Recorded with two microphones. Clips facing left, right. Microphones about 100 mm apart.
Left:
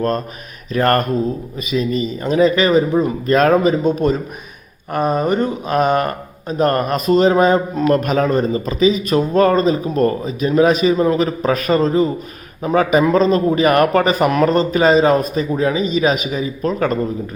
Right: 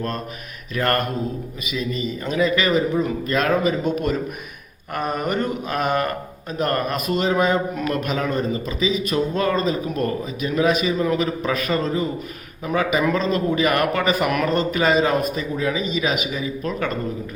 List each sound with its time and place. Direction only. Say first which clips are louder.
0.7 s speech: left 6 dB; 40° left (ahead or behind)